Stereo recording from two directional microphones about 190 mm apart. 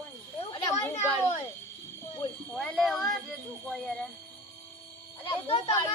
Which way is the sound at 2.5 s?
Centre (ahead or behind).